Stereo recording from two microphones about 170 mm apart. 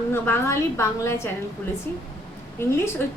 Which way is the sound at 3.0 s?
15° left (ahead or behind).